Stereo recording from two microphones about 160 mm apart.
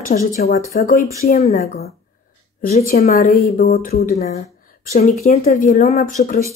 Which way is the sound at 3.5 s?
70° left (ahead or behind).